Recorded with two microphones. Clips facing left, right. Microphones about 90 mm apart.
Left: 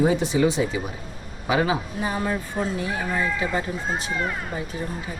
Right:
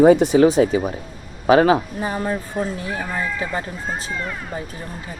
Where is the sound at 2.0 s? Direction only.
30° right (ahead or behind).